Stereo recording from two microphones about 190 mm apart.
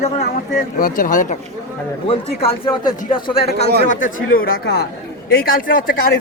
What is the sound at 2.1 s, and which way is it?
Speech, 30° left (ahead or behind).